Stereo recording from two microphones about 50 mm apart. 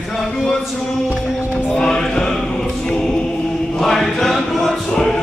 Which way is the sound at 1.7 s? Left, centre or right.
Centre.